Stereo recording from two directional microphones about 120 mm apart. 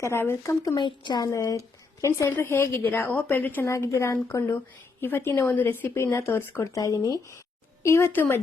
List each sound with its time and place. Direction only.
0.0 s a woman's voice: 20° left (ahead or behind)
0.8 s a woman's voice: 40° left (ahead or behind); by 8.4 s 15° left (ahead or behind)